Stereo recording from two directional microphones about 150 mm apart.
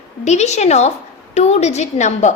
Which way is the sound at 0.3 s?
50° left (ahead or behind).